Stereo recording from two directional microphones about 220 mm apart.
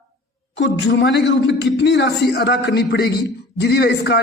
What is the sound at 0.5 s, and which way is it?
A man's voice, 55° left (ahead or behind).